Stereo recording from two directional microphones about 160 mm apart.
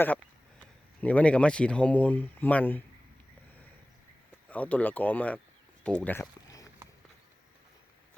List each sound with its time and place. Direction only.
1.0 s speech: 10° left (ahead or behind)
4.4 s speech: 10° left (ahead or behind)
5.8 s a sound: 5° left (ahead or behind)